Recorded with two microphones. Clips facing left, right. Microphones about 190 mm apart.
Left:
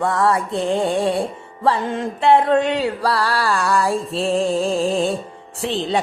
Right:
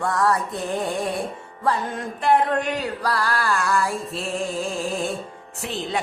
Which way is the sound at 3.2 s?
75° left (ahead or behind).